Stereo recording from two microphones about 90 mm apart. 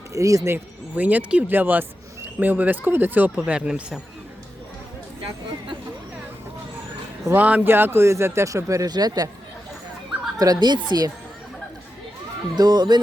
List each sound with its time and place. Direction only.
0.1 s speech: 35° right (ahead or behind)
0.5 s speech: 20° right (ahead or behind)
7.3 s speech: 20° right (ahead or behind); by 8.9 s 35° right (ahead or behind)
8.9 s speech: 50° right (ahead or behind)
10.3 s speech: 45° right (ahead or behind)
12.5 s speech: 50° right (ahead or behind)